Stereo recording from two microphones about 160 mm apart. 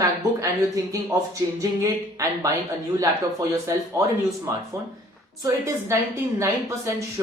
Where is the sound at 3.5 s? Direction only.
20° right (ahead or behind).